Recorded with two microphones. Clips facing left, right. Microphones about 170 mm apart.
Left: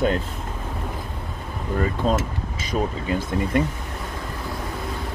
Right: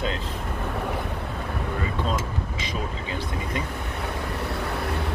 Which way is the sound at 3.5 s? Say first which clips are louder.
Left 10 dB; 55° left (ahead or behind).